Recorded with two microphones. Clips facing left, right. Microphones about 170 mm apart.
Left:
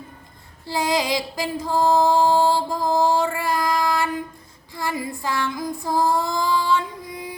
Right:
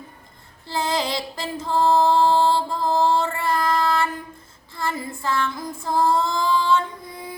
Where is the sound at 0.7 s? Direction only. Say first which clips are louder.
Left 2 dB; 15° left (ahead or behind).